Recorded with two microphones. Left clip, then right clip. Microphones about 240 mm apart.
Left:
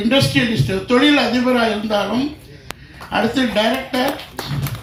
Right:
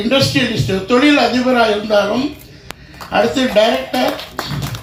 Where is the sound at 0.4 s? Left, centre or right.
Left.